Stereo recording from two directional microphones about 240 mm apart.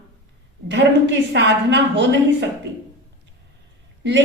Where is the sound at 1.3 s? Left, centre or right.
Right.